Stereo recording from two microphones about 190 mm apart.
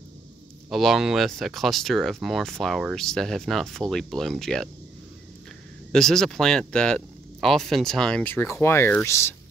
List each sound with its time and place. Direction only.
0.7 s speech: centre (ahead or behind)
5.9 s speech: centre (ahead or behind)